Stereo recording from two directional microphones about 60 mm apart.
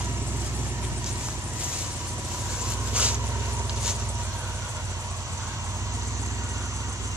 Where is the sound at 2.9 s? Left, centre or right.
Right.